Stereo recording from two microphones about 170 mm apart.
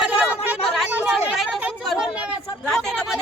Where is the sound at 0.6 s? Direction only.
Centre (ahead or behind).